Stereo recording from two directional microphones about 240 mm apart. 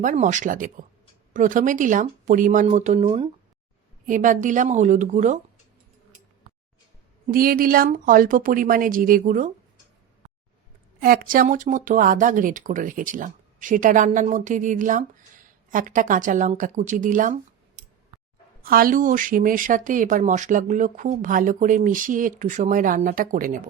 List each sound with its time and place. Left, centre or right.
0.0 s speech: right
7.3 s speech: right
11.0 s speech: right
18.6 s speech: right